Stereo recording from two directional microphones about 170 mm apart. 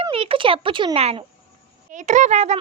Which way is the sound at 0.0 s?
35° right (ahead or behind).